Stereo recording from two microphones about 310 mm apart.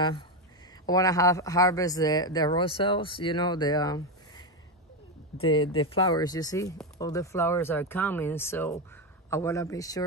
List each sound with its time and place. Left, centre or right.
0.8 s speech: centre